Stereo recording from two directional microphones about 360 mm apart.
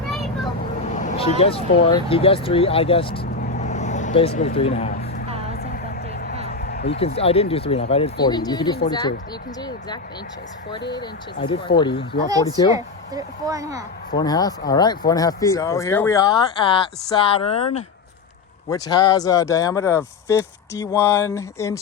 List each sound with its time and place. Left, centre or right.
0.9 s speech: centre
5.5 s vehicle: left
6.5 s speech: left
11.3 s speech: left
11.8 s speech: centre
12.7 s speech: centre
14.1 s speech: centre
18.7 s speech: centre